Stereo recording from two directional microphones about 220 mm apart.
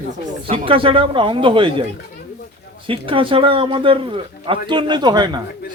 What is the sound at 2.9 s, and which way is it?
A man's voice, 25° right (ahead or behind).